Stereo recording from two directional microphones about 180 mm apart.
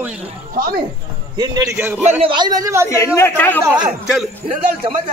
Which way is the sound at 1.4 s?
20° right (ahead or behind).